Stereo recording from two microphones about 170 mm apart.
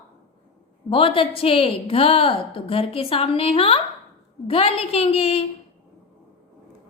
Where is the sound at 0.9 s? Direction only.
30° left (ahead or behind).